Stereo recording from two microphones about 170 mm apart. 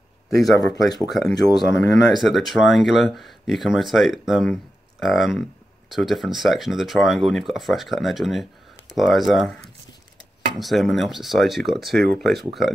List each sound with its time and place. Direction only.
0.7 s speech: 25° left (ahead or behind)
2.2 s speech: centre (ahead or behind)